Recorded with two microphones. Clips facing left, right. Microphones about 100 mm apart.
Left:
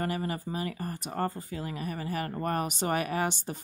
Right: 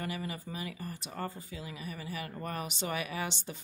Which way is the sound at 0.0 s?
45° left (ahead or behind).